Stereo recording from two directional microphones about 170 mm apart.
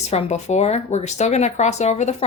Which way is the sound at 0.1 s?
40° left (ahead or behind).